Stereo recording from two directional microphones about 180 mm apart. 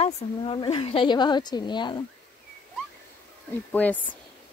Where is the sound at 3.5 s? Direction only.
10° left (ahead or behind).